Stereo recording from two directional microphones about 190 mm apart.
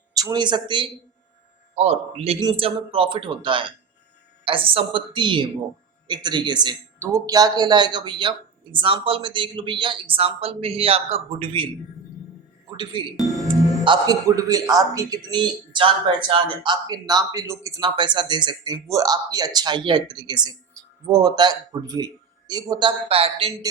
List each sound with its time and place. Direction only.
0.1 s speech: 20° right (ahead or behind)
1.7 s speech: 35° right (ahead or behind)
12.7 s speech: 25° right (ahead or behind)